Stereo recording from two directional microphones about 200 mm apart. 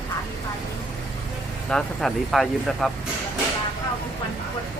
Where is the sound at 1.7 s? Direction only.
5° left (ahead or behind).